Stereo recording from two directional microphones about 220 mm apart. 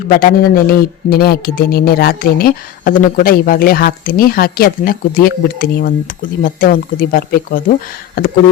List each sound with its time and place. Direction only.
0.2 s speech: 40° left (ahead or behind)